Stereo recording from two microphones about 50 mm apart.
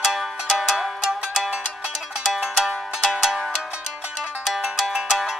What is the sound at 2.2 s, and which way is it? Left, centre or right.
Music, centre.